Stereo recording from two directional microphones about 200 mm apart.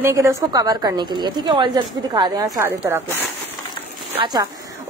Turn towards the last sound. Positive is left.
turn(degrees=-20)  # may be behind; listen again after turning